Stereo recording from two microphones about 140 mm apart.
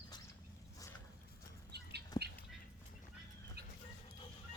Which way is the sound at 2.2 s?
30° left (ahead or behind).